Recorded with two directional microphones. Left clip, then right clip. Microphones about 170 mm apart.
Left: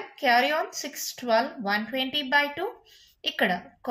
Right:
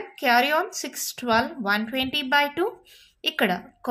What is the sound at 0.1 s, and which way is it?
A woman's voice, 40° right (ahead or behind).